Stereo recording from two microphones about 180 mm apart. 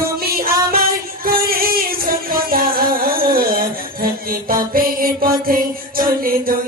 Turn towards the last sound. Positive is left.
turn(degrees=-55)  # may be behind; listen again after turning